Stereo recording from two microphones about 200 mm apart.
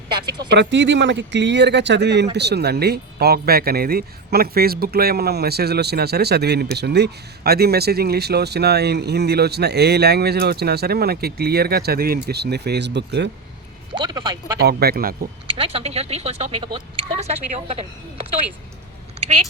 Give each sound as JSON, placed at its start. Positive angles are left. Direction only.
{"t": 0.5, "sound": "speech", "side_deg": -60}
{"t": 13.9, "sound": "speech", "side_deg": -20}
{"t": 14.6, "sound": "speech", "side_deg": -50}
{"t": 15.5, "sound": "speech", "side_deg": -30}
{"t": 19.2, "sound": "speech", "side_deg": -35}